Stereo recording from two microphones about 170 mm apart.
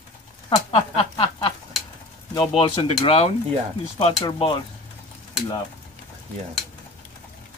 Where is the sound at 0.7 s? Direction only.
35° left (ahead or behind).